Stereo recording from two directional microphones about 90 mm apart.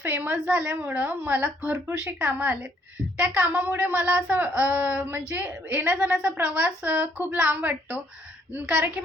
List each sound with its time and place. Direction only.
0.0 s a woman's voice: 20° right (ahead or behind)